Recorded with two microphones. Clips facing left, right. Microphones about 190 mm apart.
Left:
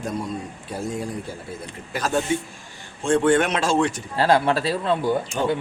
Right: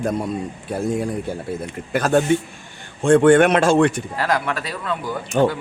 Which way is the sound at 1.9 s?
55° right (ahead or behind).